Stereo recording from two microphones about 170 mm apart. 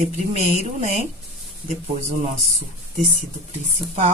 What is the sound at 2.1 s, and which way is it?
Speech, 40° right (ahead or behind).